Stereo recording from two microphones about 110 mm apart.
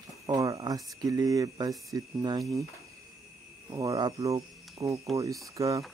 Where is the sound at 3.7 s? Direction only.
35° right (ahead or behind).